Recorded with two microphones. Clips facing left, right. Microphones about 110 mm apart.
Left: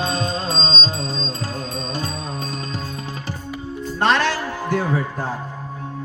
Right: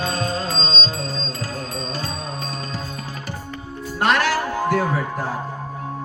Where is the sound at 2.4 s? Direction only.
20° left (ahead or behind).